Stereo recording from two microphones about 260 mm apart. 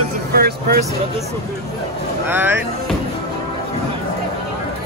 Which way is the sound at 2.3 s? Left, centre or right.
Centre.